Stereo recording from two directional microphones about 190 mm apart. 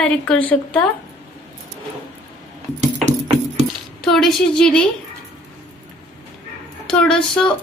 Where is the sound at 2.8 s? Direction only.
35° right (ahead or behind).